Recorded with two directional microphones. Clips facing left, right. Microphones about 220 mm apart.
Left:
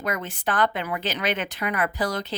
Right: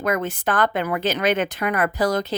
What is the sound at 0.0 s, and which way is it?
Speech, 45° right (ahead or behind).